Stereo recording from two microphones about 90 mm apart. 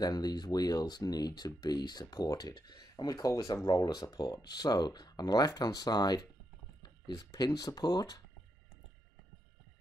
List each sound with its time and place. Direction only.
0.0 s speech: 50° left (ahead or behind)